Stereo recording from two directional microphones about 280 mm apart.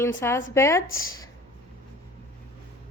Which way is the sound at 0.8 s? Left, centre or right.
Left.